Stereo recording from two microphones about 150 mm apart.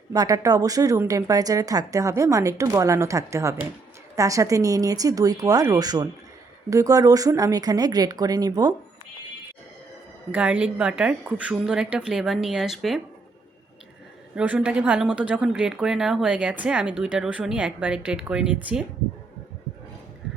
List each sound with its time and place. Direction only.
0.1 s speech: 25° right (ahead or behind)
10.3 s a woman's voice: 10° right (ahead or behind)
14.3 s speech: 10° right (ahead or behind)